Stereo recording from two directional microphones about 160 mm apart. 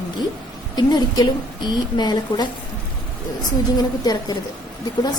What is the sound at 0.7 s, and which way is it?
A woman's voice, 25° left (ahead or behind).